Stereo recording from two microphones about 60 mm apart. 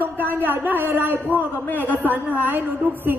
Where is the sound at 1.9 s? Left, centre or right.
Left.